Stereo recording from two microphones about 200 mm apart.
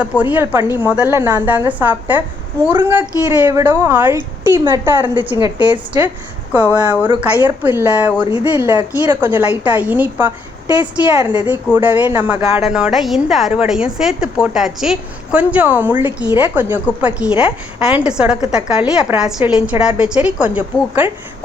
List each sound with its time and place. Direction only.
0.0 s a woman's voice: 5° right (ahead or behind)
5.4 s a woman's voice: 25° right (ahead or behind)
6.7 s a woman's voice: 10° right (ahead or behind)